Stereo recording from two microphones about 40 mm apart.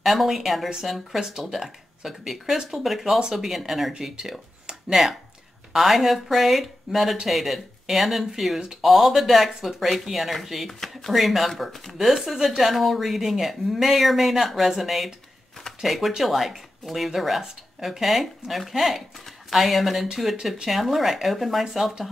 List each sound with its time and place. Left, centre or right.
0.0 s speech: centre
4.2 s a sound: centre
5.8 s speech: centre